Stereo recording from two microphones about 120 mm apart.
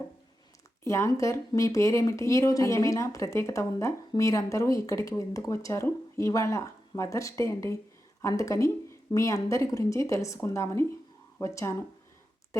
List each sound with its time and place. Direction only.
0.9 s speech: 25° left (ahead or behind)